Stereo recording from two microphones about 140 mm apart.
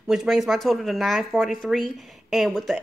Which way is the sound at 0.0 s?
5° right (ahead or behind).